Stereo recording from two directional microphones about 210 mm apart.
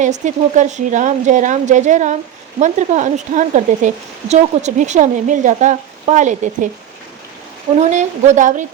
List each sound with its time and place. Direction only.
0.0 s speech: 35° right (ahead or behind)
7.8 s speech: 35° right (ahead or behind)